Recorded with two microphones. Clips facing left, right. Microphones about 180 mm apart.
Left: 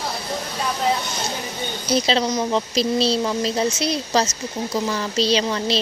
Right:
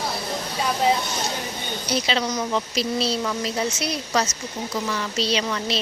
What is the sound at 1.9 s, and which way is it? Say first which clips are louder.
Speech: left 5 dB; 35° left (ahead or behind).